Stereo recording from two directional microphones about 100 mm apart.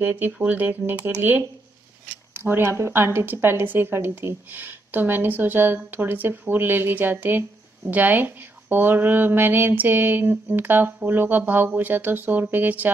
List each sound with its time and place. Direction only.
0.0 s a woman's voice: 15° right (ahead or behind)